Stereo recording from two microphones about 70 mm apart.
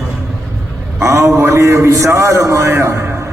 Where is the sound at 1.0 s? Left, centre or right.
Right.